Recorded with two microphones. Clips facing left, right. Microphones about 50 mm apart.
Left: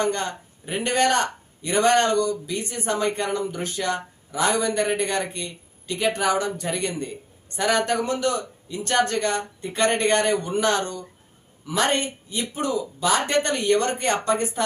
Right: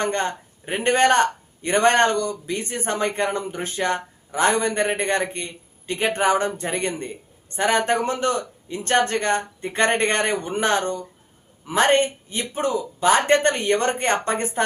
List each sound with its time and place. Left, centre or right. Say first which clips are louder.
0.0 s speech: right 1 dB; right